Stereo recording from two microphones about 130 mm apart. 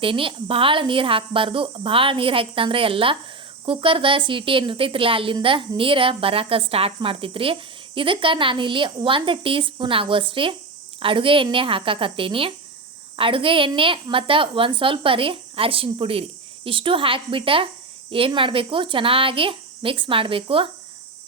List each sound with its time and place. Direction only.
0.0 s a woman's voice: 45° right (ahead or behind)